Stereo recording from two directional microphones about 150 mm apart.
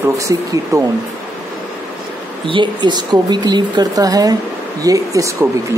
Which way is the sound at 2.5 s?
30° right (ahead or behind).